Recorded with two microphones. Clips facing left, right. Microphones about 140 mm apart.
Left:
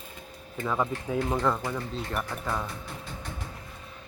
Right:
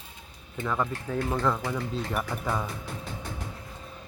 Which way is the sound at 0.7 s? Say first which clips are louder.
Left 1 dB; 10° left (ahead or behind).